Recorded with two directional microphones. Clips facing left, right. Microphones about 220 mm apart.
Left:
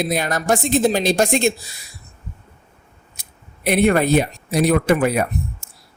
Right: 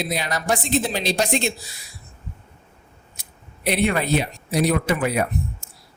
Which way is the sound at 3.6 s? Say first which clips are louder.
Left 5 dB; 50° left (ahead or behind).